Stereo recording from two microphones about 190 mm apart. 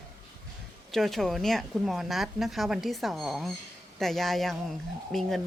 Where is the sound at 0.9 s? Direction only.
Centre (ahead or behind).